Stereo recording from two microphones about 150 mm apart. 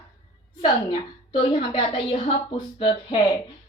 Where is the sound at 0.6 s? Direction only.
30° left (ahead or behind).